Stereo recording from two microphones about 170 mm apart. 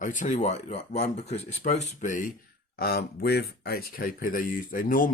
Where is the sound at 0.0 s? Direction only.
50° left (ahead or behind).